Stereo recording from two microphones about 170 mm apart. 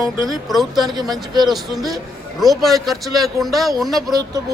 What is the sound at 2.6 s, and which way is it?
Speech, centre (ahead or behind).